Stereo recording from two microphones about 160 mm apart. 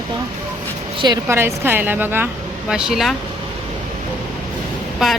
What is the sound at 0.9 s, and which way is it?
Speech, 25° right (ahead or behind).